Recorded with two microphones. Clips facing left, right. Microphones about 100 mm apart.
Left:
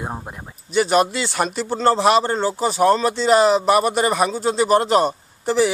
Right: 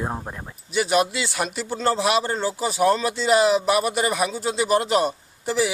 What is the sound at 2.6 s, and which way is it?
Speech, 40° left (ahead or behind).